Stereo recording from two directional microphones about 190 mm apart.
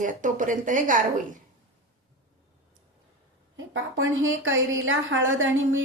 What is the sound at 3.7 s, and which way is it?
A woman's voice, 90° right.